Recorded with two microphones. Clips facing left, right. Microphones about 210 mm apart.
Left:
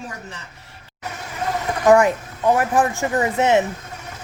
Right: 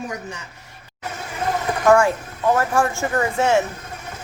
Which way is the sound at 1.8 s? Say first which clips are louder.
Left 2 dB; 20° left (ahead or behind).